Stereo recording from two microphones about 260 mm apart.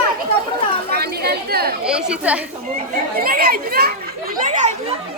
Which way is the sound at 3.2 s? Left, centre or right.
Right.